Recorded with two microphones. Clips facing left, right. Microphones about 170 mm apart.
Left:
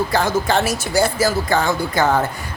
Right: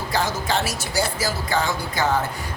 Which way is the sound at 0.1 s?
55° left (ahead or behind).